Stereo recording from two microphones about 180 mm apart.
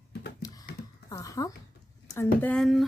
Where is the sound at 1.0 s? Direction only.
20° left (ahead or behind).